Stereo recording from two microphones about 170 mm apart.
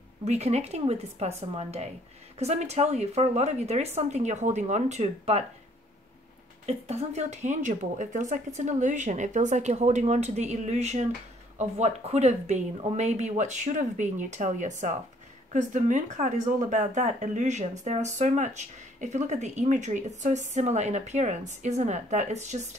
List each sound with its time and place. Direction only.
0.2 s a woman's voice: 40° right (ahead or behind)
6.6 s speech: 40° right (ahead or behind)